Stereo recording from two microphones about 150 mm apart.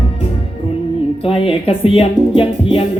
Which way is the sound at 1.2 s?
40° left (ahead or behind).